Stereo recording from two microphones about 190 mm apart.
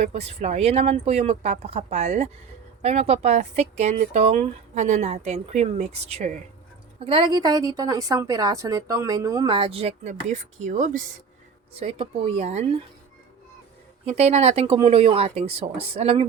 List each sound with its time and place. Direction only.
0.0 s a woman's voice: 35° right (ahead or behind)
11.7 s speech: 30° right (ahead or behind)
14.0 s speech: 35° right (ahead or behind)